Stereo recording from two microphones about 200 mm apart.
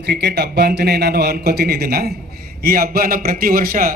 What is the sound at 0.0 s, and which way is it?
A man's voice, 55° right (ahead or behind).